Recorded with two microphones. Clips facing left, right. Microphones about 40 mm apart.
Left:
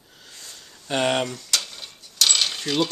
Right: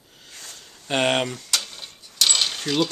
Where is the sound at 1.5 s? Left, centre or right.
Centre.